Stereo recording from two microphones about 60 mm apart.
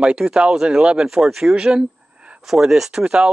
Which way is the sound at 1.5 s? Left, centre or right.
Centre.